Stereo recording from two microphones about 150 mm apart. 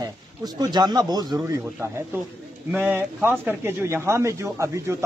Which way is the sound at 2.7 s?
15° right (ahead or behind).